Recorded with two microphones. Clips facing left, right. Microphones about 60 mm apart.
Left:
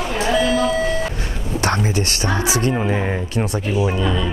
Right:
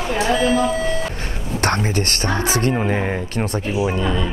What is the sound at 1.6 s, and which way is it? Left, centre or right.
Speech, right.